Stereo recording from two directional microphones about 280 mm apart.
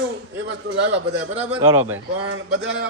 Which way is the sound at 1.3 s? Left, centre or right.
Centre.